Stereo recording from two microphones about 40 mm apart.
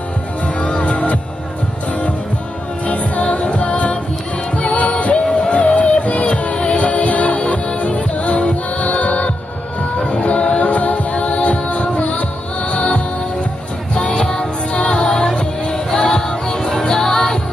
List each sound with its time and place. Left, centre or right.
0.6 s music: left
2.9 s music: left; by 17.4 s centre